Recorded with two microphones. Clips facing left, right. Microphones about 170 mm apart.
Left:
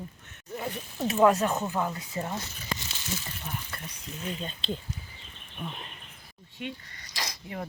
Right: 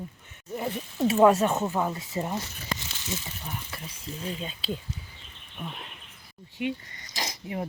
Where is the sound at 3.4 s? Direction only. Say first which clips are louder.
Even; 5° right (ahead or behind).